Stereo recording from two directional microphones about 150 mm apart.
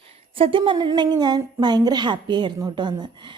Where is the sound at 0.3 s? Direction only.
35° right (ahead or behind).